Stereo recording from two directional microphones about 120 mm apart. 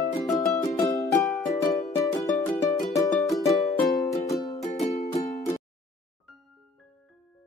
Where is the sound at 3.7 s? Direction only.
Centre (ahead or behind).